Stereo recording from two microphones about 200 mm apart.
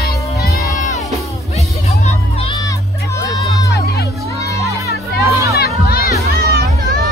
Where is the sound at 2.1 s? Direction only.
25° left (ahead or behind).